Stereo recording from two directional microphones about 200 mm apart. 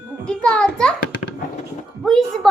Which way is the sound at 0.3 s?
5° left (ahead or behind).